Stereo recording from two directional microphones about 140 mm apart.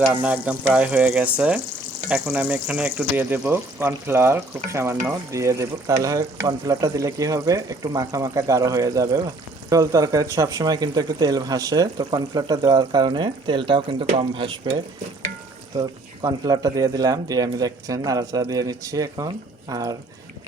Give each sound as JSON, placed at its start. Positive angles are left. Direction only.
{"t": 0.1, "sound": "speech", "side_deg": -10}